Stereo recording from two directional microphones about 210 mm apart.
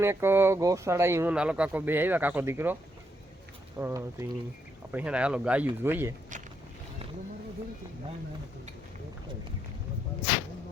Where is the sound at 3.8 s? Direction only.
10° right (ahead or behind).